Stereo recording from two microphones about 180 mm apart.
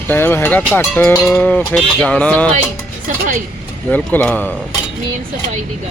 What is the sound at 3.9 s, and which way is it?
Cowbell, 10° left (ahead or behind).